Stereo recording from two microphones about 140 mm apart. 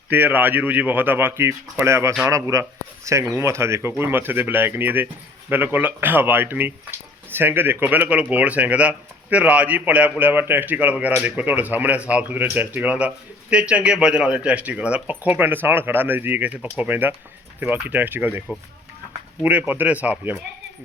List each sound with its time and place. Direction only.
0.1 s speech: 15° right (ahead or behind)